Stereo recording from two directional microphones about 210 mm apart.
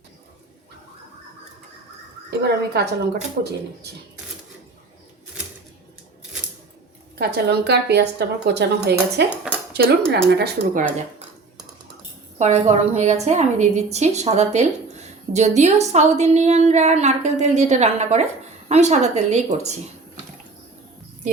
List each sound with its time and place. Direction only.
2.4 s a woman's voice: 50° right (ahead or behind)
7.2 s a woman's voice: 50° right (ahead or behind)
9.5 s cutlery: 5° right (ahead or behind)
10.1 s a woman's voice: 50° right (ahead or behind)
12.4 s a woman's voice: 35° right (ahead or behind)